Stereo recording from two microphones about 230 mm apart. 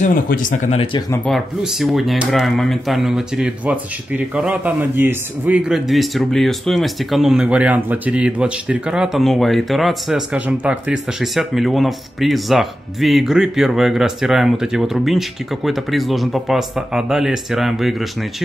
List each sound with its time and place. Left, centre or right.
0.0 s speech: left
1.1 s speech: centre